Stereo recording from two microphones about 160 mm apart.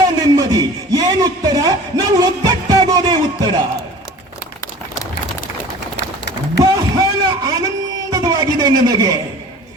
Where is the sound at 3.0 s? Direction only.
25° right (ahead or behind).